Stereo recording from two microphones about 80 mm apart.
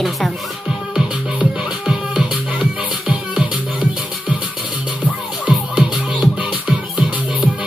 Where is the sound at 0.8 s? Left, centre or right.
Centre.